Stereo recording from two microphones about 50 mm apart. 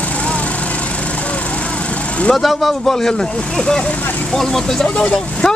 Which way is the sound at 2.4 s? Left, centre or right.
Centre.